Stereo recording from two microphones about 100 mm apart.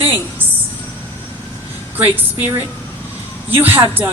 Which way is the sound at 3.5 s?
20° right (ahead or behind).